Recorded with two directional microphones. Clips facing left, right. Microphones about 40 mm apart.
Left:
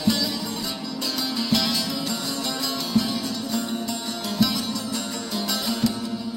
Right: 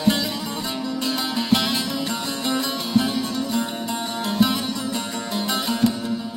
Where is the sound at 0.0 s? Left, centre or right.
Right.